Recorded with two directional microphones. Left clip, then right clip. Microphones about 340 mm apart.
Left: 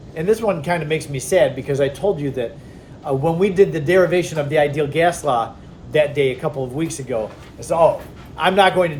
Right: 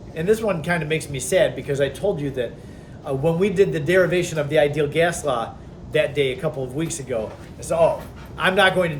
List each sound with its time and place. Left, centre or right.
0.1 s a man's voice: centre